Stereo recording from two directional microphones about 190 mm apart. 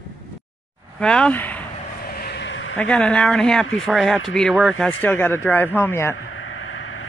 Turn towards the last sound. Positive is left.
turn(degrees=90)